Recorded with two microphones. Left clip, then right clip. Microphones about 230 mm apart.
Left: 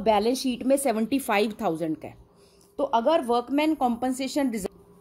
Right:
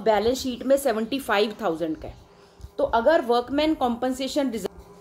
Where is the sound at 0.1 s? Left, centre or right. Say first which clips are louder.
Right 1 dB; left.